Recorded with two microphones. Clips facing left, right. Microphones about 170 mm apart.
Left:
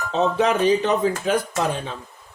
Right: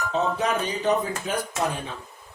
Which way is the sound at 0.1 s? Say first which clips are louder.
Left 6 dB; 90° left.